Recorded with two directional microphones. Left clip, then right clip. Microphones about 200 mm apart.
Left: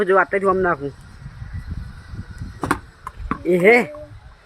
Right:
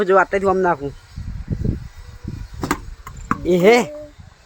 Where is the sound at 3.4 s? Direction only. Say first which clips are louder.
Even; 15° right (ahead or behind).